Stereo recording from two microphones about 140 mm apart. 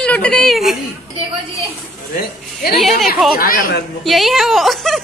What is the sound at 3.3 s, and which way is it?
Speech, 85° left.